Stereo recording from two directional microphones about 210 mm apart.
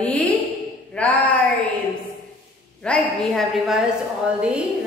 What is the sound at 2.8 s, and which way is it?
A woman's voice, 5° left (ahead or behind).